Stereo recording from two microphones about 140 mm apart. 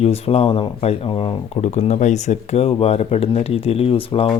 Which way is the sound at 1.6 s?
55° left (ahead or behind).